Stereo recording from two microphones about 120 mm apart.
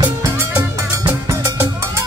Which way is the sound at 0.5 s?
25° right (ahead or behind).